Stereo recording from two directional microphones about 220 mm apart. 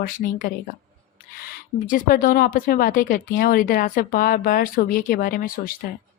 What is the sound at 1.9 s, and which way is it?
Speech, 40° left (ahead or behind).